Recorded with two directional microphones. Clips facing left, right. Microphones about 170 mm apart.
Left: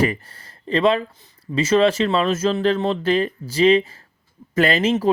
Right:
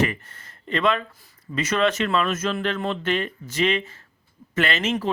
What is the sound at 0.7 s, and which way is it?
Speech, 30° left (ahead or behind).